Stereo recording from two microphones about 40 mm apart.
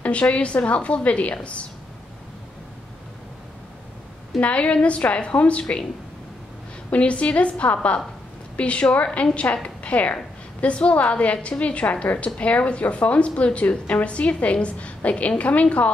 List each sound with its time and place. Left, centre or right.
0.0 s a woman's voice: left
4.4 s a woman's voice: left
6.9 s a woman's voice: left